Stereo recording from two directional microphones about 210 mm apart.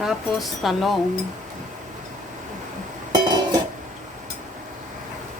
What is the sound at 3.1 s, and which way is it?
Music, 20° right (ahead or behind).